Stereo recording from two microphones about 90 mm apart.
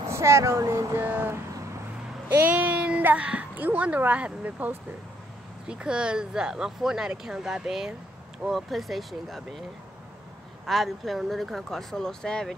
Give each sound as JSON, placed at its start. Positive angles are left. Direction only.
{"t": 0.1, "sound": "speech", "side_deg": -30}
{"t": 1.0, "sound": "a child's voice", "side_deg": -20}
{"t": 10.7, "sound": "speech", "side_deg": 0}